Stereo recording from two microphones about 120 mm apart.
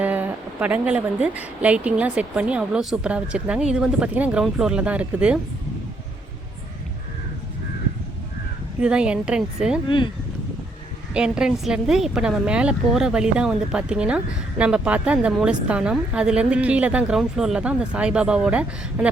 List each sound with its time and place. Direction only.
0.0 s a woman's voice: 10° right (ahead or behind)
8.8 s a woman's voice: 10° right (ahead or behind)
9.8 s speech: 45° left (ahead or behind)
11.1 s a woman's voice: 5° right (ahead or behind)